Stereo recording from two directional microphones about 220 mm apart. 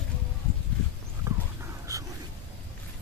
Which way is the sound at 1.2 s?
15° right (ahead or behind).